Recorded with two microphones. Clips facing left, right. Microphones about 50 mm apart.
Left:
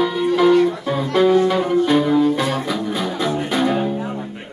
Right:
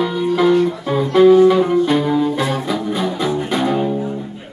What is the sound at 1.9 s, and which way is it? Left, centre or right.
Music, centre.